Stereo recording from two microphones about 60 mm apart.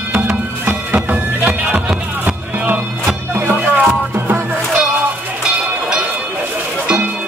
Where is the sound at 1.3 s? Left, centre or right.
Right.